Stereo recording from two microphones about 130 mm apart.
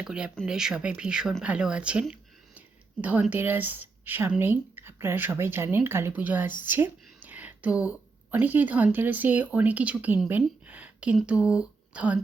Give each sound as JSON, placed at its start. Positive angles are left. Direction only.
{"t": 0.0, "sound": "a woman's voice", "side_deg": -5}